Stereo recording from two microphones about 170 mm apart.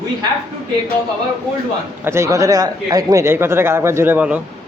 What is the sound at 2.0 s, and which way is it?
Speech, 15° right (ahead or behind).